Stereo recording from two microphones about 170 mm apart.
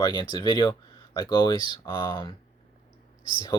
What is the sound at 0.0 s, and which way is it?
Speech, 25° left (ahead or behind).